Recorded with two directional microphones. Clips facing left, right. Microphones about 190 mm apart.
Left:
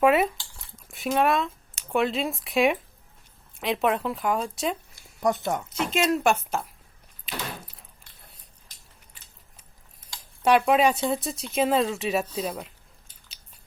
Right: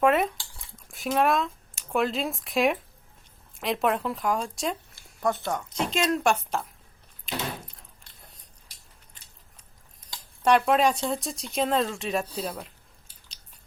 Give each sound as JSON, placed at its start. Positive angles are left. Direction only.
{"t": 0.0, "sound": "speech", "side_deg": 5}
{"t": 5.2, "sound": "speech", "side_deg": 20}
{"t": 5.8, "sound": "speech", "side_deg": 5}
{"t": 7.3, "sound": "a sound", "side_deg": 5}
{"t": 10.4, "sound": "speech", "side_deg": 5}